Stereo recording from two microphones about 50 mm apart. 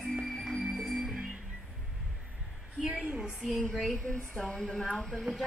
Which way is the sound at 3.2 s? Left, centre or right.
Centre.